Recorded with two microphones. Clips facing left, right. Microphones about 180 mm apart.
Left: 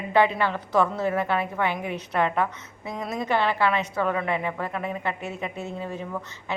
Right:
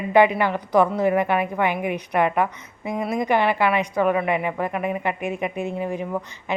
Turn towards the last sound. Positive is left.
turn(degrees=-15)  # may be behind; listen again after turning